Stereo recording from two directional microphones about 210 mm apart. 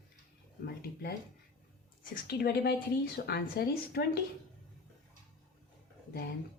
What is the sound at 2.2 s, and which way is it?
A woman's voice, 50° left (ahead or behind).